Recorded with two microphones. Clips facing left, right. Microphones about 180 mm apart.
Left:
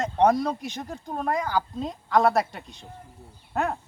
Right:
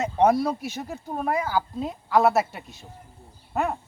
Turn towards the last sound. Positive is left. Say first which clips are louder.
# right 1 dB
turn(degrees=0)  # may be behind; listen again after turning